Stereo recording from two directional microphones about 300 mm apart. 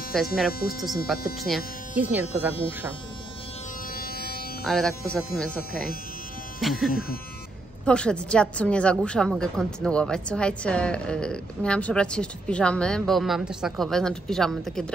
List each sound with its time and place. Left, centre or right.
0.1 s a woman's voice: centre
3.9 s music: left
4.6 s a woman's voice: centre
6.6 s a woman's voice: centre